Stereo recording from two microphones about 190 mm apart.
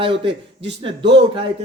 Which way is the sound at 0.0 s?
25° right (ahead or behind).